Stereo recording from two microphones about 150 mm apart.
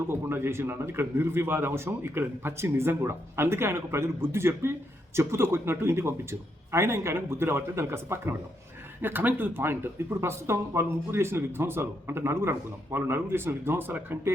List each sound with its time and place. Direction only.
0.1 s speech: 15° right (ahead or behind)